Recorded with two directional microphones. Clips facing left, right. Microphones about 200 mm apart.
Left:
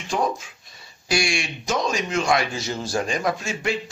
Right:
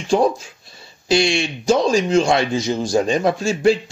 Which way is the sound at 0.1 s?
30° right (ahead or behind).